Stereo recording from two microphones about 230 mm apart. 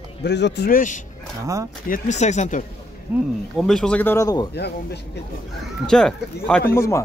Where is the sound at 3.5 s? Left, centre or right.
Centre.